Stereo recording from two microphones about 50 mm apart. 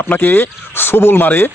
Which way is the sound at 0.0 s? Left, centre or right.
Left.